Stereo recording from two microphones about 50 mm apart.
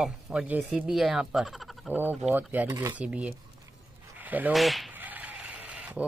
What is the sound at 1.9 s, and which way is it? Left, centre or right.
Speech, right.